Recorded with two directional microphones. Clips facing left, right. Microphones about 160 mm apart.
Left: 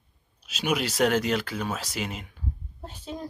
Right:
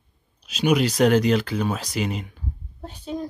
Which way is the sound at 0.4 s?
5° left (ahead or behind).